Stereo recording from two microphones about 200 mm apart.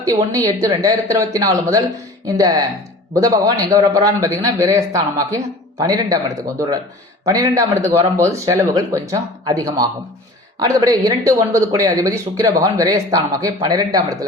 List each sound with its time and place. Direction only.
0.0 s speech: 15° right (ahead or behind)